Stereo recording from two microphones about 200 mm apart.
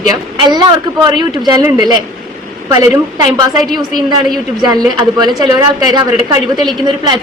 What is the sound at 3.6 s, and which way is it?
Speech, centre (ahead or behind).